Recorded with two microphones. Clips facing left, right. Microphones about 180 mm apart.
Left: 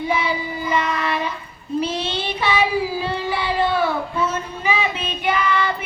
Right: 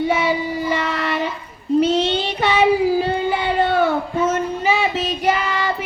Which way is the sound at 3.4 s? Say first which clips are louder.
Right 2 dB; 55° right (ahead or behind).